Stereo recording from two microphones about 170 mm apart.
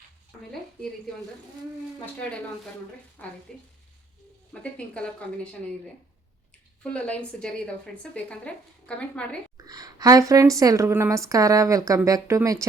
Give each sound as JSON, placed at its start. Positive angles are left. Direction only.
{"t": 3.2, "sound": "a woman's voice", "side_deg": 10}
{"t": 4.6, "sound": "a woman's voice", "side_deg": 5}
{"t": 6.8, "sound": "a woman's voice", "side_deg": 5}
{"t": 9.6, "sound": "a woman's voice", "side_deg": -20}